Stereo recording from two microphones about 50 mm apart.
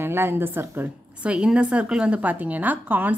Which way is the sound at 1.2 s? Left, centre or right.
Right.